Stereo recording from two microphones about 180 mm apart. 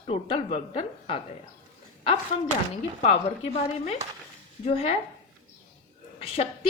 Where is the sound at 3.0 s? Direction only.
35° left (ahead or behind).